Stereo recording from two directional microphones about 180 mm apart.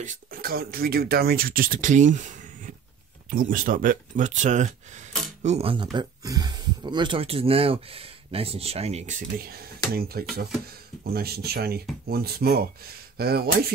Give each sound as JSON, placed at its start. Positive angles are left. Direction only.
{"t": 0.0, "sound": "speech", "side_deg": -50}
{"t": 9.4, "sound": "speech", "side_deg": -60}